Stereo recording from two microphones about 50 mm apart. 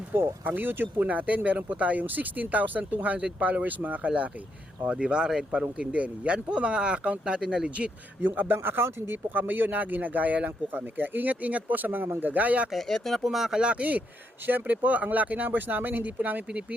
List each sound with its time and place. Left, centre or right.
0.1 s speech: right
1.0 s speech: right; by 5.5 s centre
5.8 s speech: right
8.2 s speech: right
12.9 s speech: centre
13.6 s speech: right